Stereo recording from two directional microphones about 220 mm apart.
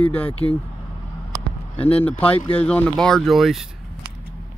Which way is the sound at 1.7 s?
25° left (ahead or behind).